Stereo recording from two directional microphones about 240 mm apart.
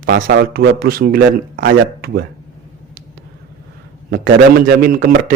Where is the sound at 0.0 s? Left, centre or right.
Right.